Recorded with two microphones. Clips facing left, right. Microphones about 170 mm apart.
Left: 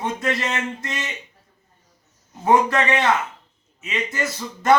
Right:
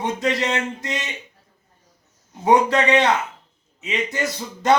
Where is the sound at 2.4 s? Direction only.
20° right (ahead or behind).